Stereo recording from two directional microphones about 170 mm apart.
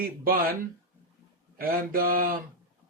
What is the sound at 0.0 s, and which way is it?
Speech, 60° right (ahead or behind).